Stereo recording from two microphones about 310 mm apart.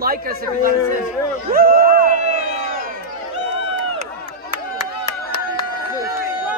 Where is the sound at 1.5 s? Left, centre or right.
Right.